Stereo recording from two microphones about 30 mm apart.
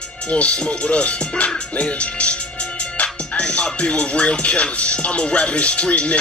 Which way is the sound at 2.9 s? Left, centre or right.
Left.